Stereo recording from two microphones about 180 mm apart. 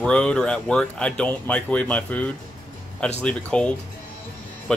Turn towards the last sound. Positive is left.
turn(degrees=5)  # may be behind; listen again after turning